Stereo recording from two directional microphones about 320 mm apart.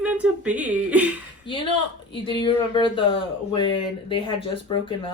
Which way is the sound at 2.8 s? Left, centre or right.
Centre.